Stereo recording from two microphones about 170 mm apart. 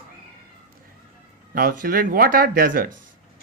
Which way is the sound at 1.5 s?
55° right (ahead or behind).